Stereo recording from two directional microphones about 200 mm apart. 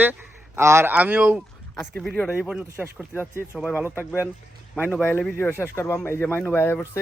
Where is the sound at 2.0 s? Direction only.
5° left (ahead or behind).